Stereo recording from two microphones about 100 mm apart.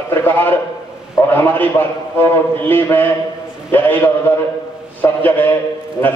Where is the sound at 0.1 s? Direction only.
20° left (ahead or behind).